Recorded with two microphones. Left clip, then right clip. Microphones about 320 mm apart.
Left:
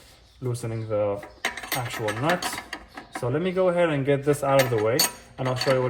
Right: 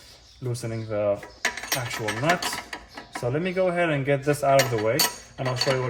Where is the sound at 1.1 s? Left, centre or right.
Centre.